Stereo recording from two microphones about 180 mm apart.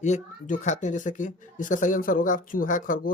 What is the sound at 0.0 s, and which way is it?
A woman's voice, 45° left (ahead or behind).